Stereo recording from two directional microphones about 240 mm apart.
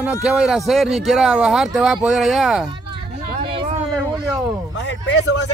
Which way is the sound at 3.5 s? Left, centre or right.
Right.